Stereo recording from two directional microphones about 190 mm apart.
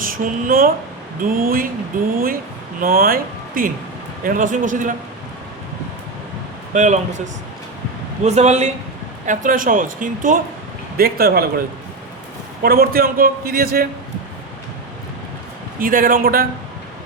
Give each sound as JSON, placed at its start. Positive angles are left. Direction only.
{"t": 0.0, "sound": "a man's voice", "side_deg": -45}
{"t": 6.7, "sound": "a man's voice", "side_deg": -40}
{"t": 8.2, "sound": "a man's voice", "side_deg": -35}
{"t": 12.6, "sound": "a man's voice", "side_deg": -50}
{"t": 15.8, "sound": "a man's voice", "side_deg": -50}